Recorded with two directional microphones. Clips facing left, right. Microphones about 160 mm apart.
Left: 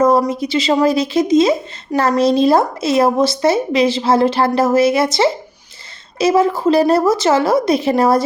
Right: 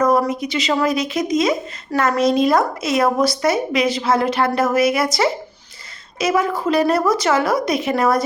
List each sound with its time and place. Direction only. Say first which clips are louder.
0.0 s a woman's voice: left 3 dB; 25° left (ahead or behind)